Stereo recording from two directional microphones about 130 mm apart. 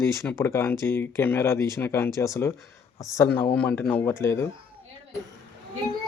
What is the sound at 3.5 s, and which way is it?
Speech, 15° left (ahead or behind).